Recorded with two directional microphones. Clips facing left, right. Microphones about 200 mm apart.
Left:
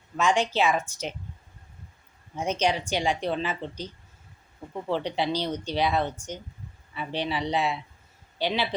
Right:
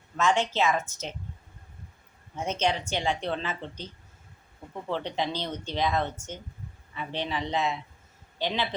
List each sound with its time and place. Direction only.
0.2 s speech: 10° left (ahead or behind)
2.3 s speech: 10° left (ahead or behind)
4.9 s speech: 10° left (ahead or behind)